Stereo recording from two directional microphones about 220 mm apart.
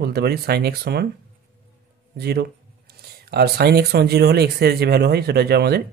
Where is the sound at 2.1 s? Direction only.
45° right (ahead or behind).